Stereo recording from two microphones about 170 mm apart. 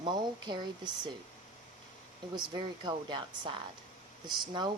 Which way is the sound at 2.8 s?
25° right (ahead or behind).